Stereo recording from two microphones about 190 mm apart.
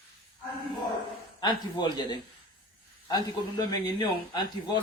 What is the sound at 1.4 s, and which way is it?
Speech, 25° left (ahead or behind).